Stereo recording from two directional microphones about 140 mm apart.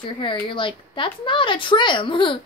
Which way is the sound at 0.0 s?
35° left (ahead or behind).